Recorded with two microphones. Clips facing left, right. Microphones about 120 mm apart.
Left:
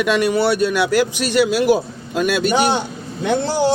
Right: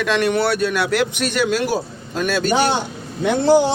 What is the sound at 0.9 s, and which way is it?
Speech, 60° right (ahead or behind).